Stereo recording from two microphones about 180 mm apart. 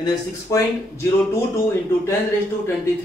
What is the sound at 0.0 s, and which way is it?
Speech, 15° left (ahead or behind).